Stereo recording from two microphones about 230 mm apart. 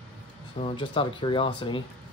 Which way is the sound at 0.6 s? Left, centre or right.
Left.